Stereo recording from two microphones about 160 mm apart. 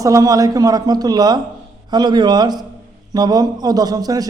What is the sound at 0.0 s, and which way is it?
A man's voice, 20° right (ahead or behind).